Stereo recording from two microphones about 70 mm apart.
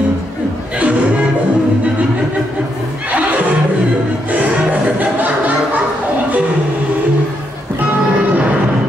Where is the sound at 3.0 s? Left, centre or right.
Right.